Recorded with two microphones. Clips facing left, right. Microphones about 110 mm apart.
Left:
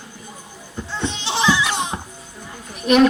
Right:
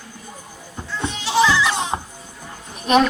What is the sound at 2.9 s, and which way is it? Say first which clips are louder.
Speech: left 1 dB; 35° right (ahead or behind).